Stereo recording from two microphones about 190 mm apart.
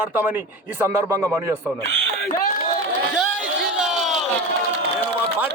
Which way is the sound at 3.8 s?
Centre (ahead or behind).